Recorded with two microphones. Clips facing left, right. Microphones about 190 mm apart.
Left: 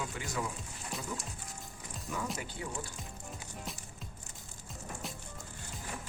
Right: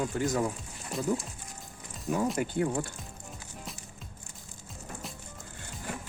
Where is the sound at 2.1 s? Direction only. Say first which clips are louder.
Right 10 dB; 50° right (ahead or behind).